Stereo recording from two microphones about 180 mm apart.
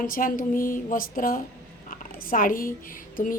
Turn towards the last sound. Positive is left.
turn(degrees=50)  # may be behind; listen again after turning